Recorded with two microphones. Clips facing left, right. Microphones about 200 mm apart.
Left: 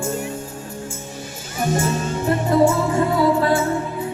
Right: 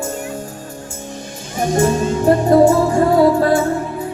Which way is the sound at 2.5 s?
45° right (ahead or behind).